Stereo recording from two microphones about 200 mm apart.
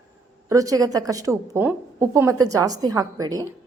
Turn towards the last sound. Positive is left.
turn(degrees=-15)  # may be behind; listen again after turning